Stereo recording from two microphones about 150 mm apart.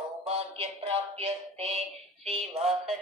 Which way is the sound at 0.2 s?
45° right (ahead or behind).